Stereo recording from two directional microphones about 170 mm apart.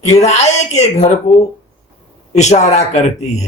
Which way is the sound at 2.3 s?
40° left (ahead or behind).